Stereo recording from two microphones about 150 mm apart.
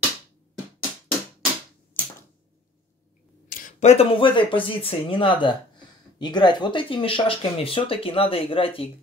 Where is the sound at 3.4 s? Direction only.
65° left (ahead or behind).